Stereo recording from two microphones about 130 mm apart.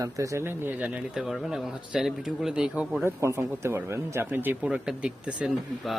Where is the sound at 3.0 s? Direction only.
20° right (ahead or behind).